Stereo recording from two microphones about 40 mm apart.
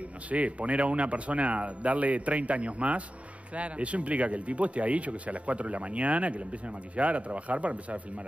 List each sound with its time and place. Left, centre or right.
0.3 s speech: right